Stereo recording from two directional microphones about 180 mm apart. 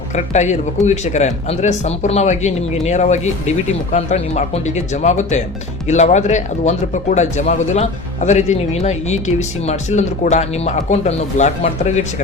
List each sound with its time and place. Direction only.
0.3 s speech: 40° left (ahead or behind)